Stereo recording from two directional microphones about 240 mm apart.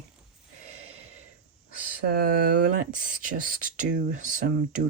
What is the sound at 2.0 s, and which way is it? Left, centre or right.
Speech, right.